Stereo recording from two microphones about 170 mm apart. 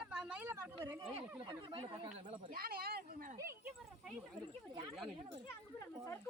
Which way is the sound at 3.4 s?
15° right (ahead or behind).